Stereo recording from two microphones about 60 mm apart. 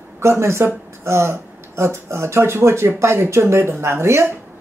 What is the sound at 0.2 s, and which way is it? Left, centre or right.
A woman's voice, right.